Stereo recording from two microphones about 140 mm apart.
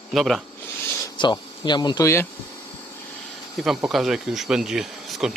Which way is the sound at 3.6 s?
Centre (ahead or behind).